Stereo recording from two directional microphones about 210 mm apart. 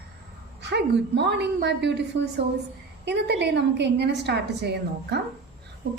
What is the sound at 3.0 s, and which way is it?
A woman's voice, 55° right (ahead or behind).